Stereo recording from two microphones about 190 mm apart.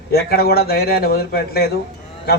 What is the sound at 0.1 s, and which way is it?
A man's voice, 55° left (ahead or behind).